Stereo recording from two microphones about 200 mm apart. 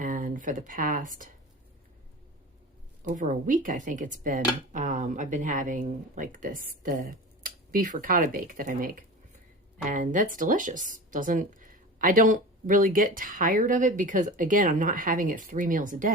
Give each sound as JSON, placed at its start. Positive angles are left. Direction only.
{"t": 0.0, "sound": "speech", "side_deg": -40}
{"t": 3.2, "sound": "speech", "side_deg": -40}